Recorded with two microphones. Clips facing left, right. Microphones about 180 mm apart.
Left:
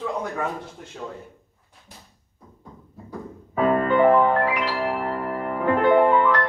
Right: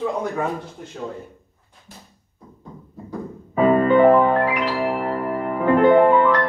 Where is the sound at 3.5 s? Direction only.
5° right (ahead or behind).